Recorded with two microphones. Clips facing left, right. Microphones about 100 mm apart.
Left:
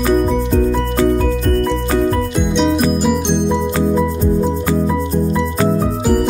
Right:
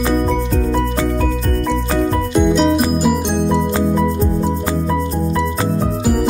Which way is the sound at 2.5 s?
5° right (ahead or behind).